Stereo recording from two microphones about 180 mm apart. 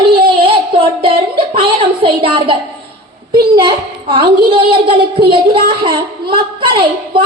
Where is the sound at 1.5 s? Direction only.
30° right (ahead or behind).